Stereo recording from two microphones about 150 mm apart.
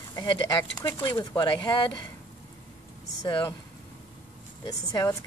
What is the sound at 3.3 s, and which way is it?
Speech, 25° left (ahead or behind).